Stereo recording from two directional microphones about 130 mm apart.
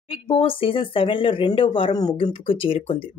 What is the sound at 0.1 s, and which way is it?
Speech, 45° left (ahead or behind).